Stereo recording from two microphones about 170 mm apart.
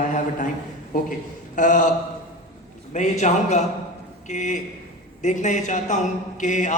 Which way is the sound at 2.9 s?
45° left (ahead or behind).